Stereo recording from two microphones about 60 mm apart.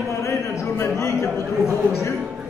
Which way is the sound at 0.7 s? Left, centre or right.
Left.